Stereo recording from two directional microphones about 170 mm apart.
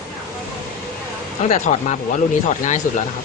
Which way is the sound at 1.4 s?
45° left (ahead or behind).